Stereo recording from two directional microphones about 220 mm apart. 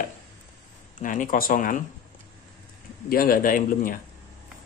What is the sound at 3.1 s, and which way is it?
Speech, 40° left (ahead or behind).